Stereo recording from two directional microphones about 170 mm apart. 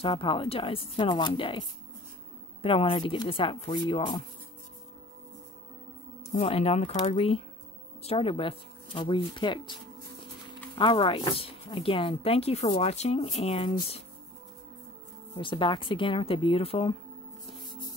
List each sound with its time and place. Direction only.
0.0 s speech: 30° left (ahead or behind)
2.6 s speech: 35° left (ahead or behind)
6.3 s speech: 35° left (ahead or behind)
10.8 s speech: 30° left (ahead or behind)
15.3 s speech: 30° left (ahead or behind)